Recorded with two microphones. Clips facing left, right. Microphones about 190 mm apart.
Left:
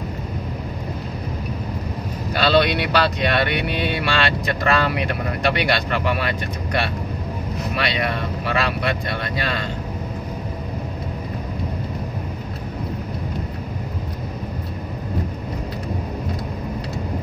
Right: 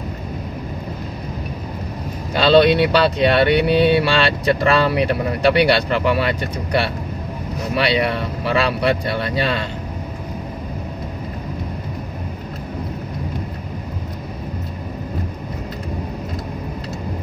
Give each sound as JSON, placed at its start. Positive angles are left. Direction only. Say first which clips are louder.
{"t": 2.5, "sound": "speech", "louder": "right 7 dB", "side_deg": -30}
{"t": 7.7, "sound": "speech", "louder": "right 6 dB", "side_deg": -30}